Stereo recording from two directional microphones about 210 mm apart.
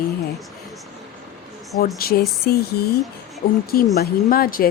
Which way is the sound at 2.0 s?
45° left (ahead or behind).